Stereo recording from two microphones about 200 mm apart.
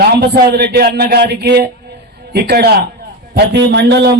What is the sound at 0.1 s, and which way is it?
A man's voice, 55° right (ahead or behind).